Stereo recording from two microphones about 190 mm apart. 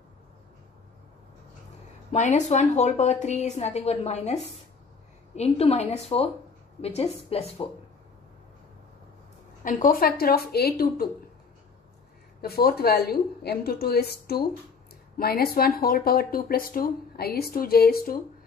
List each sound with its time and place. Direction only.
2.1 s a woman's voice: 40° left (ahead or behind)
9.6 s speech: 45° left (ahead or behind)
12.4 s a woman's voice: 55° left (ahead or behind)